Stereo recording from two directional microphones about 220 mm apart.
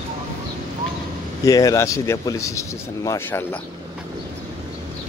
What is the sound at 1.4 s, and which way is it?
Speech, 15° left (ahead or behind).